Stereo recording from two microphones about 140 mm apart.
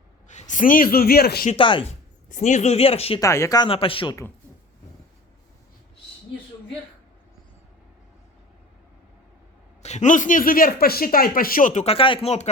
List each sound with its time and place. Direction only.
0.3 s speech: 60° left (ahead or behind); by 1.5 s 90° left
1.5 s speech: 35° left (ahead or behind)
2.3 s speech: 60° left (ahead or behind)
3.2 s speech: 20° left (ahead or behind)
3.6 s speech: 40° left (ahead or behind)
9.8 s speech: 55° left (ahead or behind)
11.9 s speech: 40° left (ahead or behind)